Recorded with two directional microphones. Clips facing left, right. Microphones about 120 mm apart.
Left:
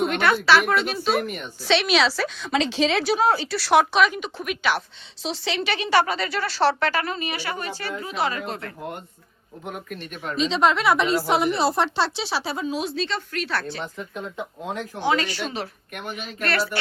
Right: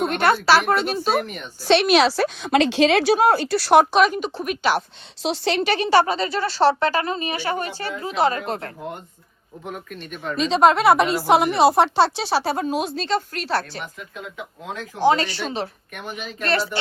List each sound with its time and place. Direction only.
0.1 s a sound: 40° right (ahead or behind)
0.7 s a woman's voice: 40° right (ahead or behind)
1.1 s speech: centre (ahead or behind)
1.6 s a woman's voice: 45° right (ahead or behind)
5.2 s a woman's voice: 55° right (ahead or behind); by 8.7 s 40° right (ahead or behind)
9.6 s speech: centre (ahead or behind)
10.5 s speech: 55° right (ahead or behind); by 13.7 s 35° right (ahead or behind)
13.8 s speech: 25° left (ahead or behind)
14.9 s a woman's voice: 35° right (ahead or behind)